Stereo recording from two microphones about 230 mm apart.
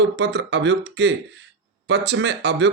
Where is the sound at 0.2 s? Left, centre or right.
Right.